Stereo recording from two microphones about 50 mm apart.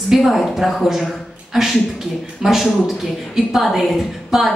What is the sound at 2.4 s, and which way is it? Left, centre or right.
A man's voice, centre.